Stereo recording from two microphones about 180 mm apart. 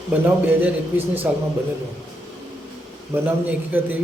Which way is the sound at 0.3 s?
10° right (ahead or behind).